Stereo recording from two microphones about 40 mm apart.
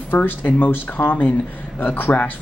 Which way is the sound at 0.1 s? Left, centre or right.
Left.